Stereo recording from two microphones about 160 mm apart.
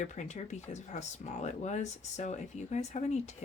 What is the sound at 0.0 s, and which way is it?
Speech, 50° left (ahead or behind).